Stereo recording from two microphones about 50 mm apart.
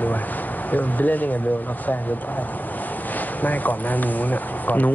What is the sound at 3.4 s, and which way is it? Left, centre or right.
Speech, left.